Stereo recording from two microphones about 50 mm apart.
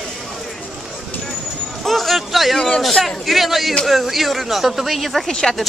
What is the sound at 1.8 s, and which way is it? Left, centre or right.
A man's voice, centre.